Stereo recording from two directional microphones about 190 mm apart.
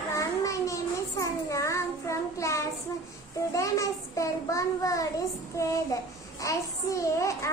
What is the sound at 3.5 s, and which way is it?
Child singing, 15° left (ahead or behind).